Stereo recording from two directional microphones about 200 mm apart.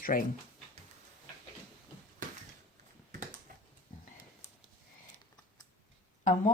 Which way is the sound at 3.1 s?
40° right (ahead or behind).